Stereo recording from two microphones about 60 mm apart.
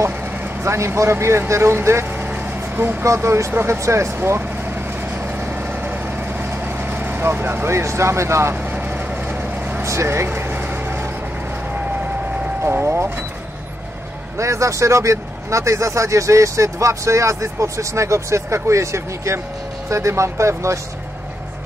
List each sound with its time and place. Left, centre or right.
0.2 s vehicle: right
0.7 s speech: right
2.0 s vehicle: right
2.7 s speech: right
3.1 s speech: right
4.2 s vehicle: right
6.5 s speech: right
8.5 s vehicle: right
9.8 s vehicle: right
12.8 s speech: right
14.3 s speech: right